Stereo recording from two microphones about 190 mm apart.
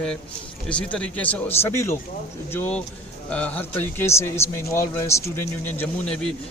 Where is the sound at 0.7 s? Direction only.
5° left (ahead or behind).